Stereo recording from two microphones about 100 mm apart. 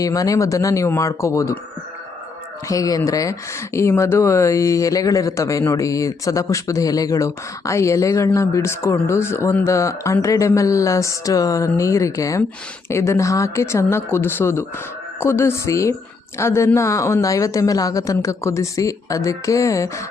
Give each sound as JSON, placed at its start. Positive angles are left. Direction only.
{"t": 0.0, "sound": "speech", "side_deg": 35}
{"t": 2.6, "sound": "speech", "side_deg": 35}